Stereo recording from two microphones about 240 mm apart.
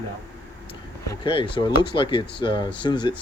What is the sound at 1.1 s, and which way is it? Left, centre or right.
Speech, left.